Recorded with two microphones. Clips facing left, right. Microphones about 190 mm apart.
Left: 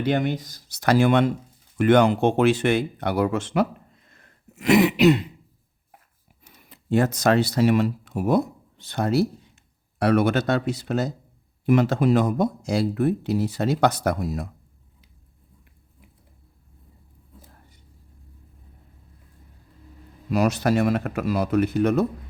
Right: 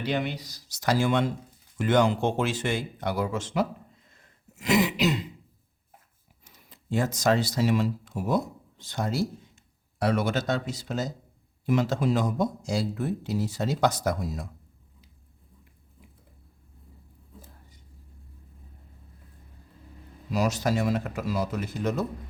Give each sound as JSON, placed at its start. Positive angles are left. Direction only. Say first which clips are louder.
{"t": 0.0, "sound": "speech", "louder": "left 6 dB", "side_deg": 50}
{"t": 6.4, "sound": "speech", "louder": "left 4 dB", "side_deg": 60}
{"t": 20.3, "sound": "speech", "louder": "left 5 dB", "side_deg": 60}